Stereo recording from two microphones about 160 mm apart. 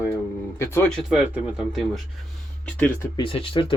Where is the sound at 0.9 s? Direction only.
5° right (ahead or behind).